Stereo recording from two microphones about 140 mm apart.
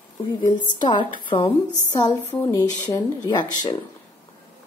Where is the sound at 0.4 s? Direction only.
30° left (ahead or behind).